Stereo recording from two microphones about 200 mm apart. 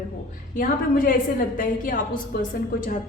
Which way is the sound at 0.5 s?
45° left (ahead or behind).